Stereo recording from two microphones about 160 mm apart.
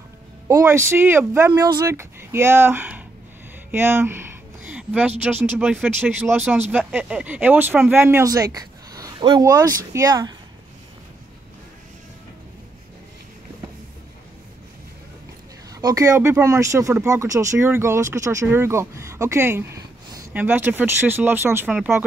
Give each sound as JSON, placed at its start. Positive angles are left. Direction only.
{"t": 0.5, "sound": "speech", "side_deg": -20}
{"t": 3.7, "sound": "a sound", "side_deg": -15}
{"t": 5.2, "sound": "speech", "side_deg": -10}
{"t": 15.7, "sound": "speech", "side_deg": -20}